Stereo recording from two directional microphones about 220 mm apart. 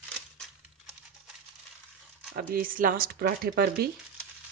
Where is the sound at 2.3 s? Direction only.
40° right (ahead or behind).